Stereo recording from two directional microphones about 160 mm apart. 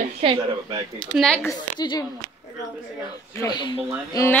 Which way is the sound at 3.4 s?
25° left (ahead or behind).